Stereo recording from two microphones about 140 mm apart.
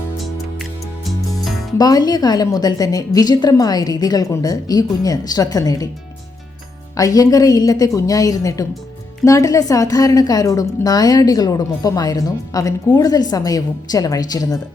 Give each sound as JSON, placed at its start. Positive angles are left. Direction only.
{"t": 1.8, "sound": "a woman's voice", "side_deg": 25}
{"t": 6.9, "sound": "a woman's voice", "side_deg": 25}